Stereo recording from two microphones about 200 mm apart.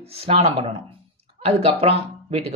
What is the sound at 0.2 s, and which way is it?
Speech, 30° right (ahead or behind).